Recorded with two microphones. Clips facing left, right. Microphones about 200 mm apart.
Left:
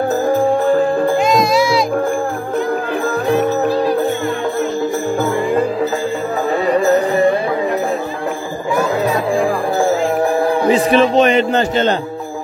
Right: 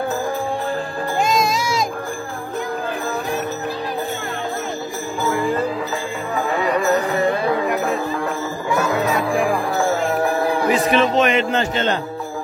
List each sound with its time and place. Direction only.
1.2 s music: 45° right (ahead or behind)
3.3 s music: 50° left (ahead or behind)
10.7 s a sound: 35° left (ahead or behind)